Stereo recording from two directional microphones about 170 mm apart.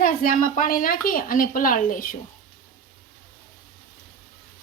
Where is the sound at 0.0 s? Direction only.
55° left (ahead or behind).